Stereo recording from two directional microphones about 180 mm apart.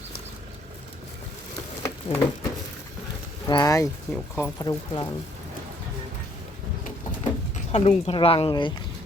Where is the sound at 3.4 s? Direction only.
20° left (ahead or behind).